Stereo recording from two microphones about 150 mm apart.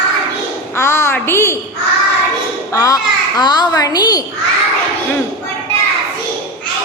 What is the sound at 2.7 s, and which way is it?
A child's voice, 25° left (ahead or behind).